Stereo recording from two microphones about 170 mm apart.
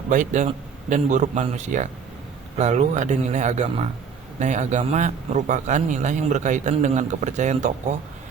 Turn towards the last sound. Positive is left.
turn(degrees=-45)  # may be behind; listen again after turning